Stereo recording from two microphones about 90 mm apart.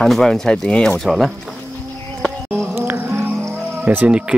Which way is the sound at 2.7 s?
25° right (ahead or behind).